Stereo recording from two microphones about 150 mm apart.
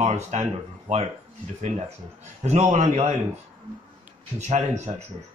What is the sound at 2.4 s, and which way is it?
Speech, 50° right (ahead or behind).